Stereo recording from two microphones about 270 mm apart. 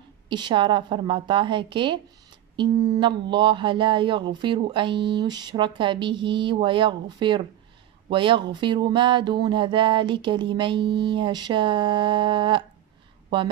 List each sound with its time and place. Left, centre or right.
0.3 s speech: centre